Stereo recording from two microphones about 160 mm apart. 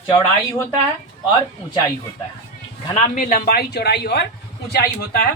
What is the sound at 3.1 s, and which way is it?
Speech, 60° left (ahead or behind).